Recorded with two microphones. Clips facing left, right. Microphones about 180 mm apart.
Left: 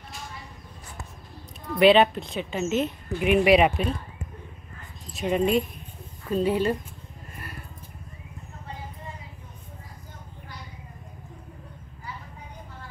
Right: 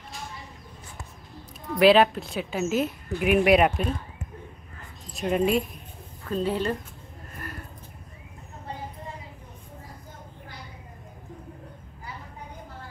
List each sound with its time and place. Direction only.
1.8 s a woman's voice: centre (ahead or behind)
5.1 s speech: centre (ahead or behind)
6.2 s speech: 10° left (ahead or behind)